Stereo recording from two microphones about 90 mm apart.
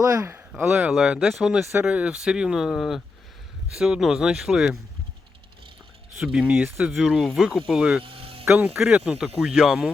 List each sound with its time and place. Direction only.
0.0 s speech: 35° right (ahead or behind)
0.5 s speech: 5° right (ahead or behind)
6.1 s speech: 10° right (ahead or behind)
8.0 s a sound: 90° right
8.5 s speech: 25° right (ahead or behind)
9.2 s speech: centre (ahead or behind)